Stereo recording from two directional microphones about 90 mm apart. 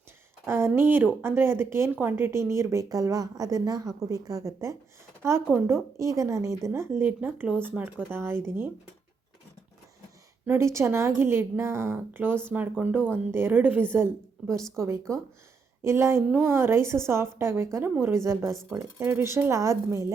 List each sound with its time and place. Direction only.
0.4 s a woman's voice: 25° right (ahead or behind)
8.1 s a woman's voice: 30° right (ahead or behind)
10.4 s a woman's voice: 30° right (ahead or behind)
15.8 s a woman's voice: 30° right (ahead or behind)